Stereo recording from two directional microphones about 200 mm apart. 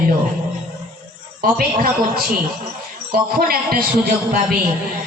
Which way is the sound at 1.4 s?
45° right (ahead or behind).